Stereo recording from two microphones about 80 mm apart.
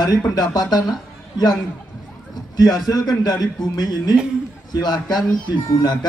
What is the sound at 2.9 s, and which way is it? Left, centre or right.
A man's voice, left.